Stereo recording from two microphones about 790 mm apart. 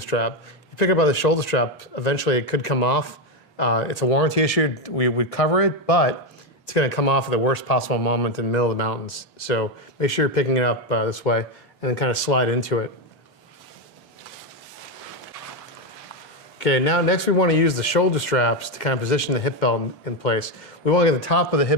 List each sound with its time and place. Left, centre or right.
0.1 s speech: left
6.7 s speech: left
16.6 s speech: left
20.8 s speech: left